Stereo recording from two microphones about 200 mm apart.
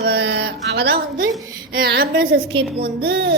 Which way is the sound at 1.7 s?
50° right (ahead or behind).